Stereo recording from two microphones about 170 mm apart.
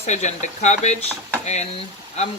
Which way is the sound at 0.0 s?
45° left (ahead or behind).